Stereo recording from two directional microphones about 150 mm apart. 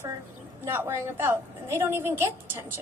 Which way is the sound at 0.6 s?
15° right (ahead or behind).